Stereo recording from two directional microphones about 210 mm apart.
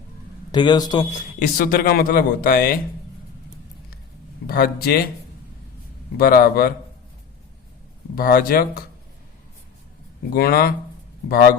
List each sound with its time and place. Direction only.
0.5 s a man's voice: 20° left (ahead or behind)
1.4 s speech: 45° left (ahead or behind)
4.4 s speech: 45° left (ahead or behind)
6.1 s speech: 45° left (ahead or behind)
8.1 s speech: 45° left (ahead or behind)
10.3 s speech: 45° left (ahead or behind)